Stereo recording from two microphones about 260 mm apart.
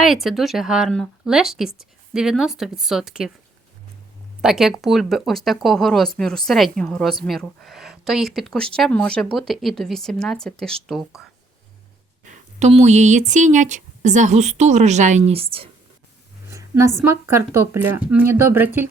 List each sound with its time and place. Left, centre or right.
0.0 s speech: centre
4.4 s speech: centre
12.2 s speech: right
16.5 s speech: centre